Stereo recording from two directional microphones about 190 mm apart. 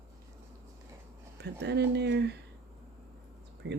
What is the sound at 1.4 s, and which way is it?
Speech, 60° right (ahead or behind).